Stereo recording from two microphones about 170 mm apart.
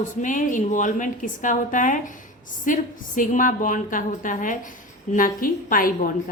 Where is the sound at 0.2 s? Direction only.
50° left (ahead or behind).